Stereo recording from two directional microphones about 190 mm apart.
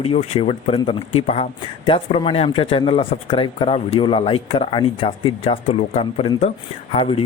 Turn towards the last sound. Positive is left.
turn(degrees=30)  # may be behind; listen again after turning